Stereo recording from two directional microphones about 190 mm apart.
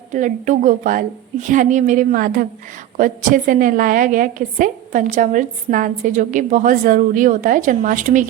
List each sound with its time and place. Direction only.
0.1 s a woman's voice: 40° right (ahead or behind)